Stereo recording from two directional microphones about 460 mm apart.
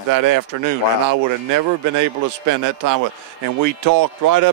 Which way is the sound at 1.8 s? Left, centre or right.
Right.